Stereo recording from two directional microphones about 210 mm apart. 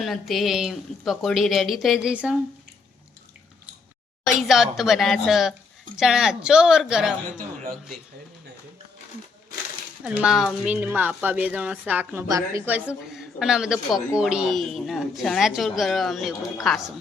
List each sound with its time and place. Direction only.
0.0 s a woman's voice: centre (ahead or behind)
4.3 s a woman's voice: centre (ahead or behind)
10.0 s a woman's voice: 5° right (ahead or behind)